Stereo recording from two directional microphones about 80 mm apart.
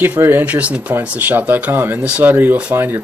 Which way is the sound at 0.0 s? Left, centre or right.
Right.